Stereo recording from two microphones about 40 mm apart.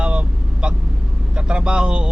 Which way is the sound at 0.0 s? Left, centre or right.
Right.